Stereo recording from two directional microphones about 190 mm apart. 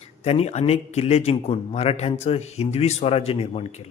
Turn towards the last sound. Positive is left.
turn(degrees=35)  # may be behind; listen again after turning